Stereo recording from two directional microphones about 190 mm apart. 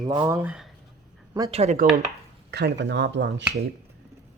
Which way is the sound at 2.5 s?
65° right (ahead or behind).